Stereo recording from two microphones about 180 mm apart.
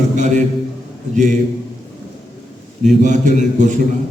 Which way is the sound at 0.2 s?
45° right (ahead or behind).